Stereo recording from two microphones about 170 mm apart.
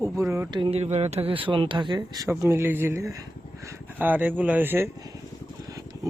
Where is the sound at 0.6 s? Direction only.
35° right (ahead or behind).